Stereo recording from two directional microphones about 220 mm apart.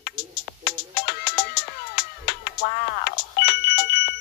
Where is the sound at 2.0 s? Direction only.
45° left (ahead or behind).